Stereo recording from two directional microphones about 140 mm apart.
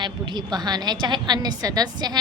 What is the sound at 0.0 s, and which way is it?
A woman's voice, 30° right (ahead or behind).